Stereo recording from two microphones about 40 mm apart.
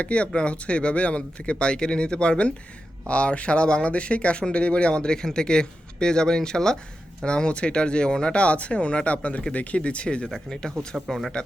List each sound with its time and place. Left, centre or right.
0.0 s speech: left; by 11.2 s centre